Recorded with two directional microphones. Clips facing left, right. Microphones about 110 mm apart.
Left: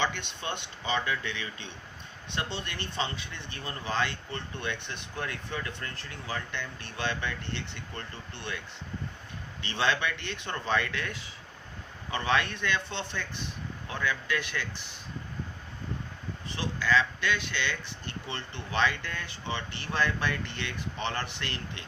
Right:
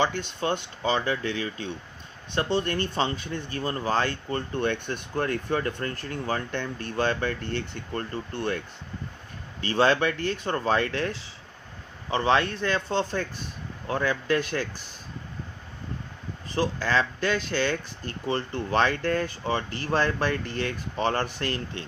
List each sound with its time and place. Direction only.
0.0 s speech: 40° right (ahead or behind)
16.6 s speech: 45° right (ahead or behind)